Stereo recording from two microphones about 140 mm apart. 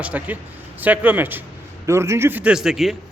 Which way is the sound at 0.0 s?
10° right (ahead or behind).